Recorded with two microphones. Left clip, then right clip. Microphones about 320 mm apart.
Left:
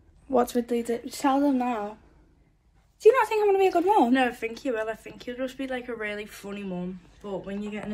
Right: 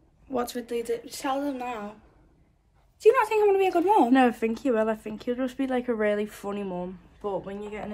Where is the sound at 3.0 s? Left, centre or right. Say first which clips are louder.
Even; centre.